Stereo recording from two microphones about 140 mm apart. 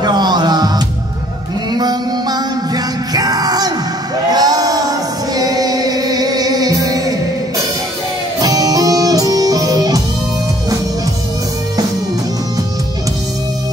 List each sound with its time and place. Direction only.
0.0 s music: 30° right (ahead or behind)
4.3 s a sound: 30° right (ahead or behind)
5.3 s music: 25° right (ahead or behind)
8.4 s music: 25° right (ahead or behind)